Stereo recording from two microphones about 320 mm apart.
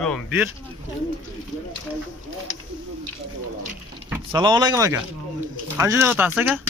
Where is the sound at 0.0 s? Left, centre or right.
Centre.